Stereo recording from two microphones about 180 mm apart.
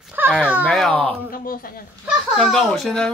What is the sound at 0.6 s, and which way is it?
Speech, 5° left (ahead or behind).